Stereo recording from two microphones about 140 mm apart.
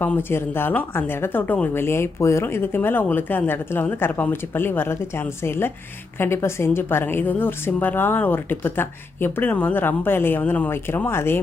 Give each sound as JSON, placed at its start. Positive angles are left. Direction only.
{"t": 0.0, "sound": "speech", "side_deg": 15}